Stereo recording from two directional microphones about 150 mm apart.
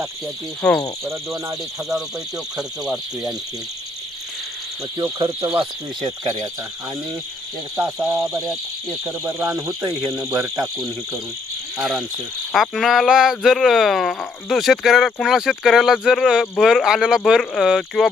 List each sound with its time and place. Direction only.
0.6 s speech: 5° left (ahead or behind)
1.0 s speech: 20° right (ahead or behind)
2.6 s speech: 5° right (ahead or behind)
6.0 s speech: 25° right (ahead or behind)
7.8 s speech: 20° right (ahead or behind)
11.8 s speech: 5° right (ahead or behind)